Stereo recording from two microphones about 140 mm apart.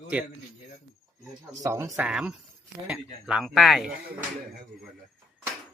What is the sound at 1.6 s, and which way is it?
Speech, 20° right (ahead or behind).